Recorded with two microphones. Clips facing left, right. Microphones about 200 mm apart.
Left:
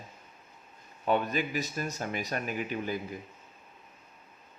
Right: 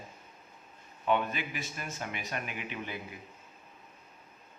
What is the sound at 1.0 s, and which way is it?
A man's voice, 40° left (ahead or behind).